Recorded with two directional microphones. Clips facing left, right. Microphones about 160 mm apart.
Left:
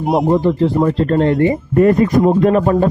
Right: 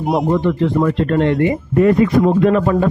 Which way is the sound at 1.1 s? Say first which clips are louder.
Left 2 dB; 35° left (ahead or behind).